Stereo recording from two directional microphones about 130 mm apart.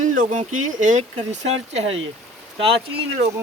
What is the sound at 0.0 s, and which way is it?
Speech, 75° right (ahead or behind).